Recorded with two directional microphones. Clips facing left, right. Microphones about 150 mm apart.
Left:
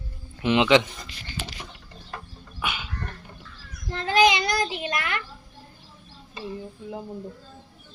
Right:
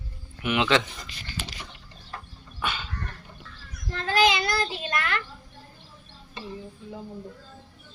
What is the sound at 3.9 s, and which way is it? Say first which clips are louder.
Child singing: left 3 dB; 20° left (ahead or behind).